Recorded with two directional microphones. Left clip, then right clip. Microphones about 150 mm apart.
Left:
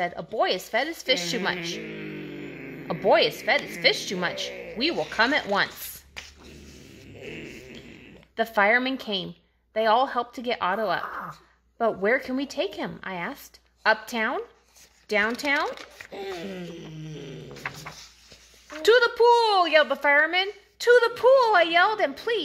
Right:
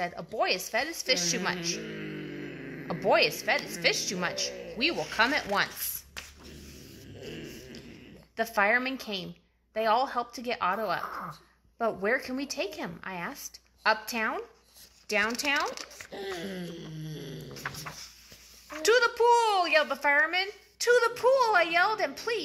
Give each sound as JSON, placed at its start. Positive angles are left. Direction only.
{"t": 0.0, "sound": "a woman's voice", "side_deg": 45}
{"t": 1.8, "sound": "a sound", "side_deg": 25}
{"t": 2.9, "sound": "a woman's voice", "side_deg": 45}
{"t": 7.2, "sound": "a sound", "side_deg": 5}
{"t": 8.4, "sound": "a woman's voice", "side_deg": 45}
{"t": 11.1, "sound": "speech", "side_deg": 20}
{"t": 11.8, "sound": "a woman's voice", "side_deg": 45}
{"t": 15.7, "sound": "speech", "side_deg": 15}
{"t": 16.9, "sound": "a sound", "side_deg": 60}
{"t": 17.5, "sound": "dog", "side_deg": 15}
{"t": 18.8, "sound": "a woman's voice", "side_deg": 55}